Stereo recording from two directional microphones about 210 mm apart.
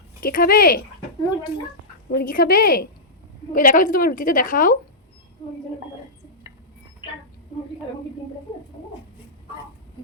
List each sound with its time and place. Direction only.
0.2 s a woman's voice: 45° left (ahead or behind)
2.0 s a woman's voice: 45° left (ahead or behind)